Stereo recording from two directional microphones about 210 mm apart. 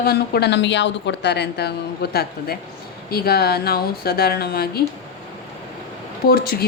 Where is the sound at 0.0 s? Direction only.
50° left (ahead or behind).